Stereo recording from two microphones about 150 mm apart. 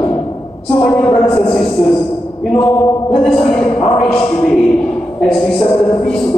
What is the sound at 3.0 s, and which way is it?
A woman's voice, 35° left (ahead or behind).